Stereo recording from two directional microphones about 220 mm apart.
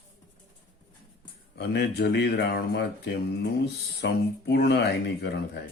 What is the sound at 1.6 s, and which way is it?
Speech, 50° left (ahead or behind).